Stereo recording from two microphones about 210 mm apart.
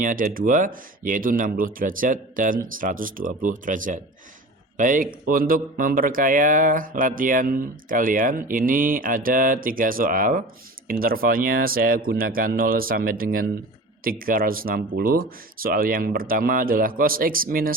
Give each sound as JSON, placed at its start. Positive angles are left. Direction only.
{"t": 0.0, "sound": "speech", "side_deg": -40}